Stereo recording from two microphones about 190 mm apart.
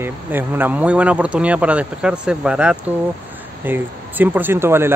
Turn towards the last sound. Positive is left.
turn(degrees=-10)  # may be behind; listen again after turning